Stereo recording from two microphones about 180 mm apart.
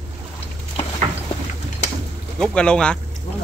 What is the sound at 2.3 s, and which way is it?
Speech, 5° left (ahead or behind).